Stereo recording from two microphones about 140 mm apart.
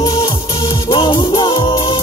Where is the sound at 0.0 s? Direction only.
35° left (ahead or behind).